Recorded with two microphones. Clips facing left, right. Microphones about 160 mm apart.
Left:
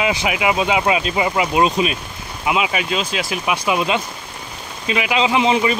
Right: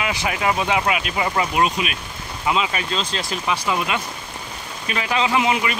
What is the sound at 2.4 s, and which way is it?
Speech, 15° left (ahead or behind).